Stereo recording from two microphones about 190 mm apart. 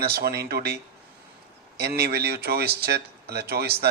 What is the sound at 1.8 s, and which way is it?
Speech, 55° right (ahead or behind).